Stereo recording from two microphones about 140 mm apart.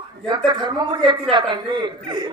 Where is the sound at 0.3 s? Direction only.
30° right (ahead or behind).